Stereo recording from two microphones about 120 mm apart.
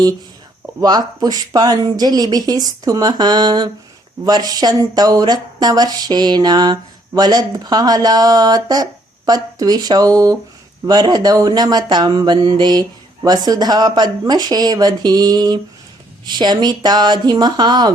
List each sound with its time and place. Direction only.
0.8 s speech: 35° right (ahead or behind)